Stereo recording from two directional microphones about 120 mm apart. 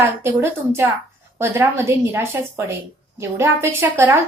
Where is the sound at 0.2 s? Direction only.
20° right (ahead or behind).